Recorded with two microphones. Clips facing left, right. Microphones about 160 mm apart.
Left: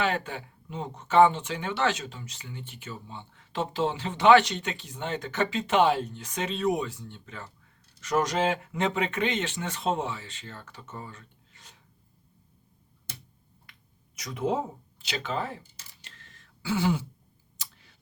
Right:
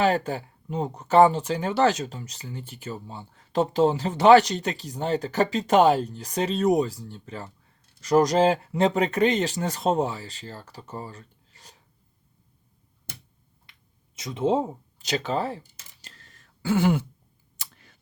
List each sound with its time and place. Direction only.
0.0 s speech: 35° right (ahead or behind)
14.2 s speech: 25° right (ahead or behind)
14.9 s speech: 40° right (ahead or behind)
15.8 s a sound: 35° right (ahead or behind); by 17.1 s 55° right (ahead or behind)
17.6 s clicking: 50° right (ahead or behind)